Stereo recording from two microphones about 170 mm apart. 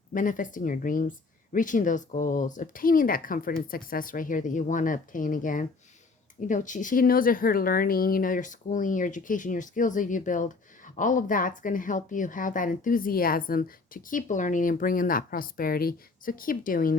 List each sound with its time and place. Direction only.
0.1 s a woman's voice: 50° left (ahead or behind)